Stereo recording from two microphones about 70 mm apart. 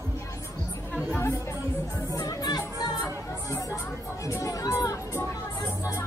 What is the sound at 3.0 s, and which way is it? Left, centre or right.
Music, left.